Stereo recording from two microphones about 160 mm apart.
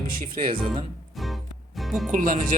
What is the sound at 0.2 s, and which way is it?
Speech, 60° right (ahead or behind).